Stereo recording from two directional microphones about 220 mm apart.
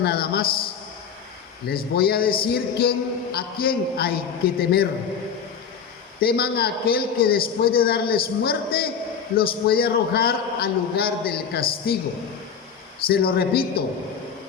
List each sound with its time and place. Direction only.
0.0 s a man's voice: 45° left (ahead or behind)
1.6 s a man's voice: 45° left (ahead or behind)
6.1 s a man's voice: 45° left (ahead or behind)
13.1 s a man's voice: 45° left (ahead or behind)